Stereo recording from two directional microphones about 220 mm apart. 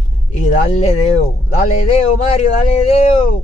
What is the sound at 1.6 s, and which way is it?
Speech, 30° left (ahead or behind).